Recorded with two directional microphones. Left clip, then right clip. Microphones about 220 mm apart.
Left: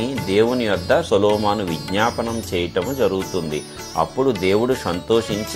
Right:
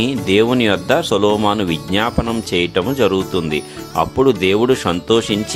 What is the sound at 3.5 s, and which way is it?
Speech, 45° right (ahead or behind).